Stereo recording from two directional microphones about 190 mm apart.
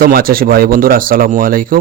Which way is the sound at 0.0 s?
50° right (ahead or behind).